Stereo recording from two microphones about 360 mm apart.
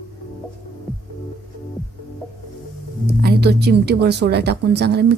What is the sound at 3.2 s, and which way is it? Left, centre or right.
A woman's voice, right.